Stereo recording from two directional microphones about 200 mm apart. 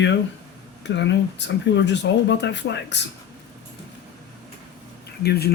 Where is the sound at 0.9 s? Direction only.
60° left (ahead or behind).